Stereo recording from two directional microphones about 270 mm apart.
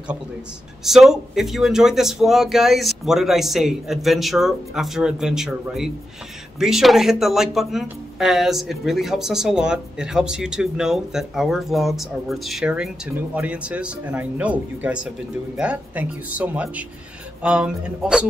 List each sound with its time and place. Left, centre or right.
0.8 s speech: centre